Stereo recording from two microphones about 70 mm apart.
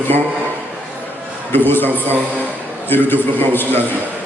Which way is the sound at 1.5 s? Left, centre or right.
Left.